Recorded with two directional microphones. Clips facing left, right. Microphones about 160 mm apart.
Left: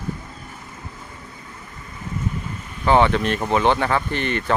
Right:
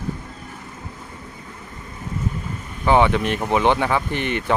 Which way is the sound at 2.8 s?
15° right (ahead or behind).